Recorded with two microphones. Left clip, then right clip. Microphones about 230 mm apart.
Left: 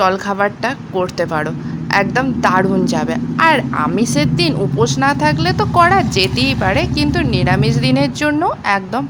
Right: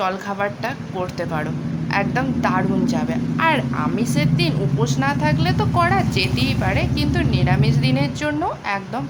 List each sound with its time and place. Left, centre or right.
0.0 s a man's voice: left